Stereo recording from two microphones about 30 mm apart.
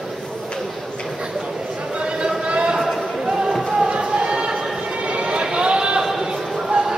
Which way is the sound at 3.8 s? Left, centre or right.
Right.